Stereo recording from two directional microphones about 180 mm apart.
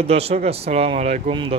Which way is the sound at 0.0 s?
35° right (ahead or behind).